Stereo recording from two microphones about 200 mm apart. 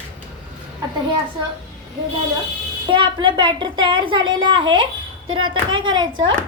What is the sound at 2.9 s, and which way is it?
A woman's voice, 25° right (ahead or behind).